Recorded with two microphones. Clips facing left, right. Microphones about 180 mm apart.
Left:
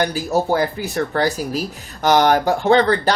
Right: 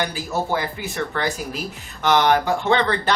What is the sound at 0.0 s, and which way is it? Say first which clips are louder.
Speech: left 5 dB; 40° left (ahead or behind).